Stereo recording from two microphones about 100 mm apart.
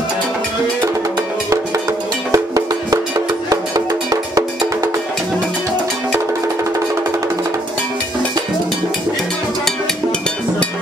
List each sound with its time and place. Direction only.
2.3 s music: 40° right (ahead or behind)